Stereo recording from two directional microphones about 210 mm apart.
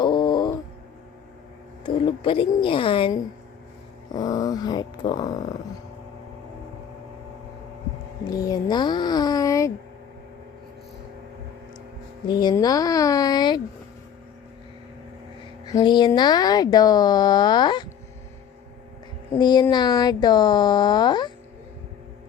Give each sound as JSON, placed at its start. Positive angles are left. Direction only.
{"t": 0.0, "sound": "a sound", "side_deg": 20}
{"t": 1.8, "sound": "speech", "side_deg": 25}
{"t": 4.1, "sound": "dog", "side_deg": 15}
{"t": 8.3, "sound": "speech", "side_deg": 15}
{"t": 12.4, "sound": "dog", "side_deg": 20}
{"t": 15.7, "sound": "speech", "side_deg": 20}
{"t": 19.4, "sound": "speech", "side_deg": 20}